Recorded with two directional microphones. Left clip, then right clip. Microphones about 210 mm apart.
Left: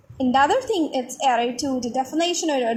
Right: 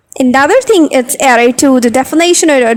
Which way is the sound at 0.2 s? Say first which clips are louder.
Right 11 dB; 45° right (ahead or behind).